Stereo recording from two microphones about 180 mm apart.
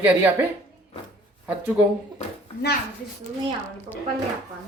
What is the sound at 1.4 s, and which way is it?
Speech, 10° right (ahead or behind).